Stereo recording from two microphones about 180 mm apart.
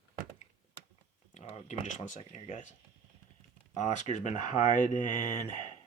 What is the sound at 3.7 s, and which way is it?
Speech, 40° left (ahead or behind).